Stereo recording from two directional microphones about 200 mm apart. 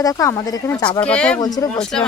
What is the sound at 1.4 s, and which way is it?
Speech, 20° left (ahead or behind).